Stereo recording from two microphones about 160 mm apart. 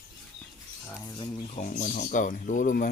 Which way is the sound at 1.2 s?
45° left (ahead or behind).